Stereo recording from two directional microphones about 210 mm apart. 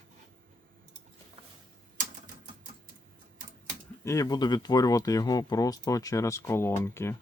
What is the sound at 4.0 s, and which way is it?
Speech, 15° left (ahead or behind).